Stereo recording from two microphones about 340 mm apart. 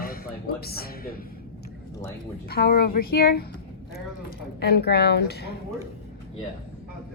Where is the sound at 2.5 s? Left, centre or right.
Left.